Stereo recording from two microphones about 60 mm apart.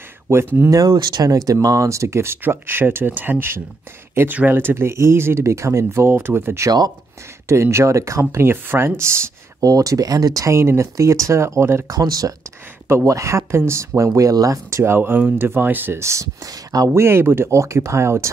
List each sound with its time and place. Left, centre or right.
0.7 s speech: right
2.4 s speech: right
7.4 s speech: right
9.6 s speech: right
11.9 s speech: right
12.8 s speech: right
14.7 s speech: right
16.0 s speech: right
16.9 s speech: right